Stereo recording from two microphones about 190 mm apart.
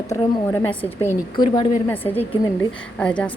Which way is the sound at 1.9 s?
10° left (ahead or behind).